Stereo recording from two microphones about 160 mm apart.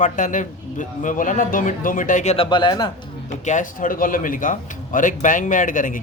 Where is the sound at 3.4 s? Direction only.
55° left (ahead or behind).